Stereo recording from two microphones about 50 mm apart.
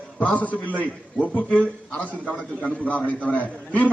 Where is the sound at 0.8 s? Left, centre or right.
Left.